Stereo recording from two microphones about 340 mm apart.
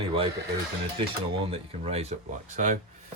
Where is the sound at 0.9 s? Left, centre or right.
Centre.